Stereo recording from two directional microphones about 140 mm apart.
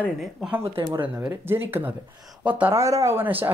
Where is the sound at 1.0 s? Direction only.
10° right (ahead or behind).